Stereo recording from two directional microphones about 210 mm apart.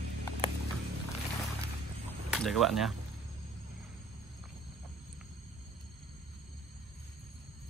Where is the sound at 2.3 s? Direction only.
Centre (ahead or behind).